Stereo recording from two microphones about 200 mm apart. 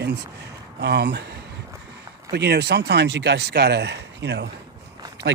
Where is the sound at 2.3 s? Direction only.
55° right (ahead or behind).